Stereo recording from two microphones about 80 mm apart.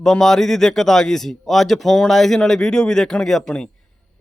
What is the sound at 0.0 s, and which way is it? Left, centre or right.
Speech, centre.